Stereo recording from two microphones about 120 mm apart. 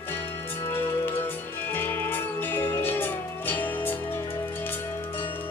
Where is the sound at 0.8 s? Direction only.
15° left (ahead or behind).